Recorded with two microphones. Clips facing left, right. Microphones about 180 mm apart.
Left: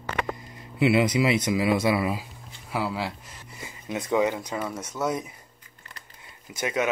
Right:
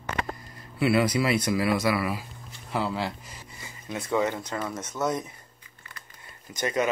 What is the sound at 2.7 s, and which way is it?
Speech, 5° left (ahead or behind).